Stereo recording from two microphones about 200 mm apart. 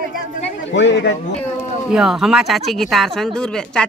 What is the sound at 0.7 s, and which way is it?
Speech, 60° left (ahead or behind).